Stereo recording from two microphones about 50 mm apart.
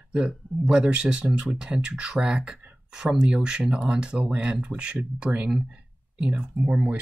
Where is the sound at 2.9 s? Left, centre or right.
Centre.